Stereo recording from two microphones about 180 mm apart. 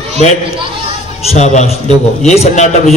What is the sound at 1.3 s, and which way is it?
A man's voice, 40° left (ahead or behind).